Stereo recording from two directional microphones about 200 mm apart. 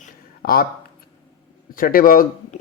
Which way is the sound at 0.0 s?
45° left (ahead or behind).